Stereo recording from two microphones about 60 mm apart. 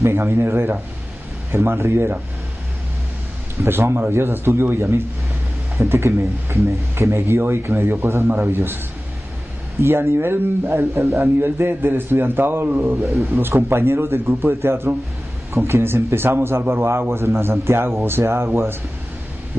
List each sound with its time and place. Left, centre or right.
0.0 s a man's voice: right
3.6 s speech: right
9.8 s a man's voice: right
13.1 s speech: right
13.4 s a man's voice: right